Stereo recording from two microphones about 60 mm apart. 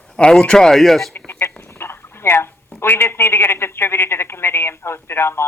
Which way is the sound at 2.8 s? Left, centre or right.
Left.